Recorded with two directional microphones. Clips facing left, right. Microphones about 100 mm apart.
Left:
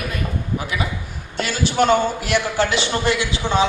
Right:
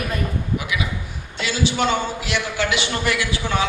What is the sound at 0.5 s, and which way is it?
A man's voice, 40° left (ahead or behind).